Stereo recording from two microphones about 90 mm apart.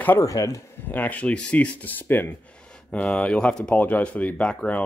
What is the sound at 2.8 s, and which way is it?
Speech, 10° left (ahead or behind).